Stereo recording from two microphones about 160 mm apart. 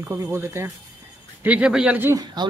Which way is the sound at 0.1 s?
15° right (ahead or behind).